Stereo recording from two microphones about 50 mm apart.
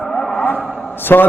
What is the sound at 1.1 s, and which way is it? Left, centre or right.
Speech, left.